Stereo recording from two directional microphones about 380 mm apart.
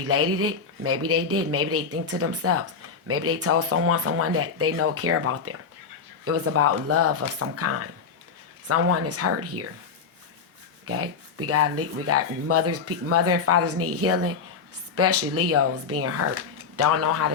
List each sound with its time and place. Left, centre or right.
0.0 s speech: right
10.8 s speech: right